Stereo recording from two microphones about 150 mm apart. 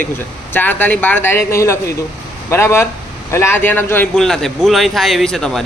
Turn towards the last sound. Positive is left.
turn(degrees=5)  # may be behind; listen again after turning